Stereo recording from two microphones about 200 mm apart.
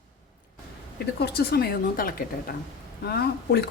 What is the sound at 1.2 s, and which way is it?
A woman's voice, 50° left (ahead or behind).